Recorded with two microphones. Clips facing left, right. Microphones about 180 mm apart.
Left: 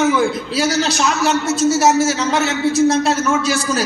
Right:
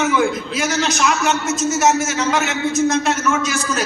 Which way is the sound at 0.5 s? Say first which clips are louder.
Left 4 dB; 35° left (ahead or behind).